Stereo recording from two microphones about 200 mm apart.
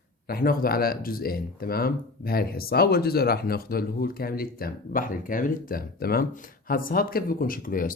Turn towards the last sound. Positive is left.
turn(degrees=45)  # may be behind; listen again after turning